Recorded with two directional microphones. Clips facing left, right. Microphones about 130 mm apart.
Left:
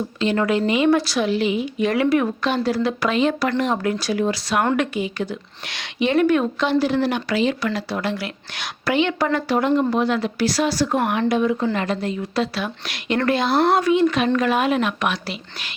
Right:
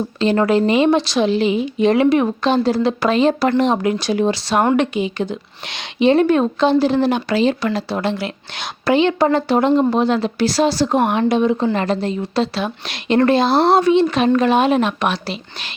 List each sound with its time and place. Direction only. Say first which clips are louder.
0.2 s speech: right 5 dB; 35° right (ahead or behind)
0.9 s speech: right 3 dB; 20° right (ahead or behind)
3.6 s speech: right 5 dB; 20° right (ahead or behind)